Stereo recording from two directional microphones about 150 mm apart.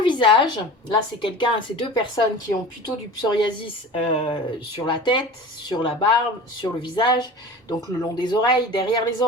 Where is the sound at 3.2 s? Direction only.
30° left (ahead or behind).